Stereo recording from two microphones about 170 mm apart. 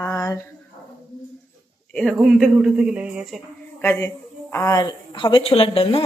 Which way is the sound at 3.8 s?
15° left (ahead or behind).